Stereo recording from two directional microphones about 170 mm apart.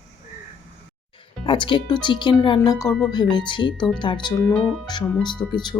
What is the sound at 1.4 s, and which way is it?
Music, 30° left (ahead or behind).